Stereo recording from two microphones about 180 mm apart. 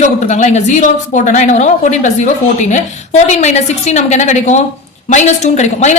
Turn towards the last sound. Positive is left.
turn(degrees=40)  # may be behind; listen again after turning